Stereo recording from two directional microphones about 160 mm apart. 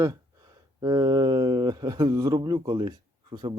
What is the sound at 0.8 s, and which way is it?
A man's voice, 25° right (ahead or behind).